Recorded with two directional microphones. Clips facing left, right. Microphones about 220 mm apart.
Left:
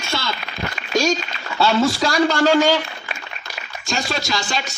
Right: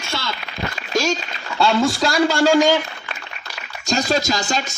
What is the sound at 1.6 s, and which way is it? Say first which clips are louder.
A man's voice: even; 5° left (ahead or behind).